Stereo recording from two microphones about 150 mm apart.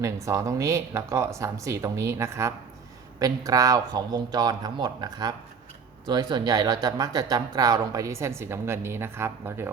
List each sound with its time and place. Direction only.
0.0 s speech: 20° right (ahead or behind)